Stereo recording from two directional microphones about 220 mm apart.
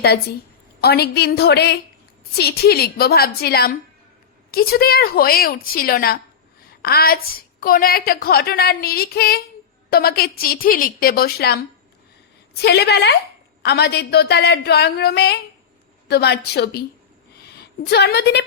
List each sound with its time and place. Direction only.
0.0 s a woman's voice: 45° left (ahead or behind)
12.6 s a woman's voice: 50° left (ahead or behind)